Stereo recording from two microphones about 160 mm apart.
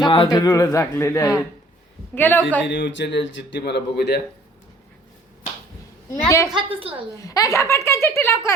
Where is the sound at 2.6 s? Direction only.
90° left.